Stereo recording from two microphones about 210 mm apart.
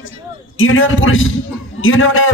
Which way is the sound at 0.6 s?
70° left (ahead or behind).